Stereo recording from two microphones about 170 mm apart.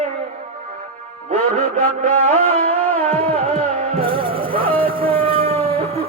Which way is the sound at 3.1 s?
40° right (ahead or behind).